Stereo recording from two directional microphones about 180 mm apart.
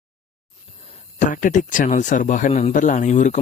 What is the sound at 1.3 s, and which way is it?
Speech, 45° left (ahead or behind).